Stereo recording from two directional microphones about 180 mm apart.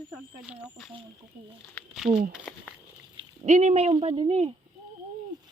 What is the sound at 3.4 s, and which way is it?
Speech, 40° right (ahead or behind).